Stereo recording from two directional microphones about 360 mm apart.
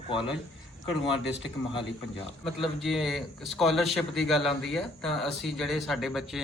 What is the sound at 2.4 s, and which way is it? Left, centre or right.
A man's voice, centre.